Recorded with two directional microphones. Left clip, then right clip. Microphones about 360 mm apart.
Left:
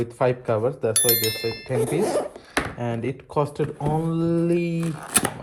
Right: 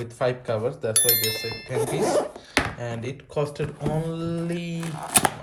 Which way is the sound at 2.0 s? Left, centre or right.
Centre.